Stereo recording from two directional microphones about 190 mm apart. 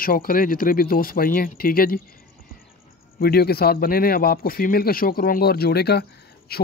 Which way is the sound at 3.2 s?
55° left (ahead or behind).